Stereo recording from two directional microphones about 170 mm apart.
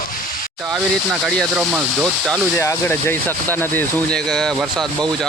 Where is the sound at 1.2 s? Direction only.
5° left (ahead or behind).